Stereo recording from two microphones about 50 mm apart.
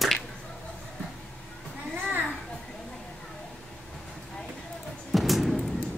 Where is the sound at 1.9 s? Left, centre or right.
Right.